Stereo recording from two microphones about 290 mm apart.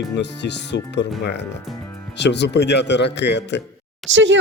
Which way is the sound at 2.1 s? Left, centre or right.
Left.